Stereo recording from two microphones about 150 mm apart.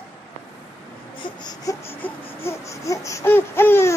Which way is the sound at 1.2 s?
25° left (ahead or behind).